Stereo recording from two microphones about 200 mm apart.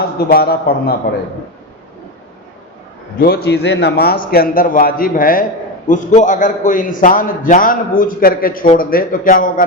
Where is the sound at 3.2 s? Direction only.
50° left (ahead or behind).